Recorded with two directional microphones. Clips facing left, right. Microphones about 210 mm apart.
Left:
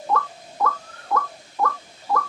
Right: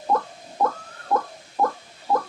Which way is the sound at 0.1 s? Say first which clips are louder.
Right 1 dB; 30° right (ahead or behind).